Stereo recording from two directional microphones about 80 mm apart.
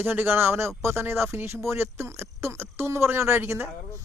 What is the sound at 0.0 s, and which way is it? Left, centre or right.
Speech, right.